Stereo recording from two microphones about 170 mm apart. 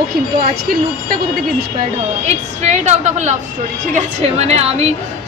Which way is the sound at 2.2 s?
40° right (ahead or behind).